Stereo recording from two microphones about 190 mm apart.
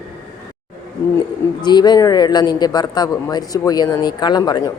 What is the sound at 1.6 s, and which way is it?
A woman's voice, 20° left (ahead or behind).